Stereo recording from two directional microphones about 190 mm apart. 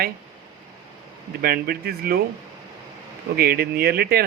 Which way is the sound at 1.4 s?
55° right (ahead or behind).